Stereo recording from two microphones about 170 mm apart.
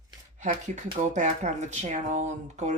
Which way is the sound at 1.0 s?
45° right (ahead or behind).